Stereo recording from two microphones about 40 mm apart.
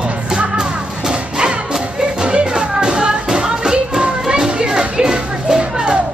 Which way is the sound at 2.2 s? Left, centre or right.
Right.